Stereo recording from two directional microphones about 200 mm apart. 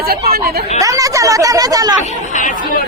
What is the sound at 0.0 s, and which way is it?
Speech, 50° right (ahead or behind).